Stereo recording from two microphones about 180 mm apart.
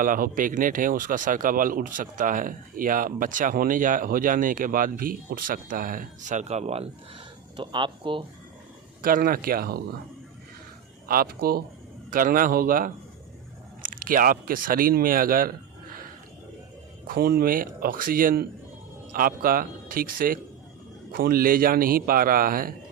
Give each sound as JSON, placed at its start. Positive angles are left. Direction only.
{"t": 0.0, "sound": "speech", "side_deg": -50}
{"t": 9.0, "sound": "speech", "side_deg": -50}
{"t": 11.1, "sound": "speech", "side_deg": -55}
{"t": 17.1, "sound": "speech", "side_deg": -55}